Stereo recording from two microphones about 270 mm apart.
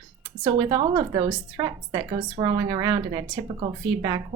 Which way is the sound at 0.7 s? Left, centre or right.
Centre.